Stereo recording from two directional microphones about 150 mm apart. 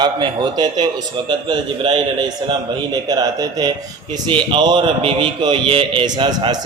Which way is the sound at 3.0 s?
25° right (ahead or behind).